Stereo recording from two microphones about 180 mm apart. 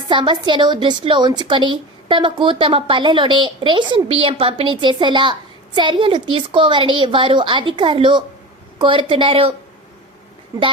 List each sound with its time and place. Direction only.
0.1 s a woman's voice: 25° right (ahead or behind)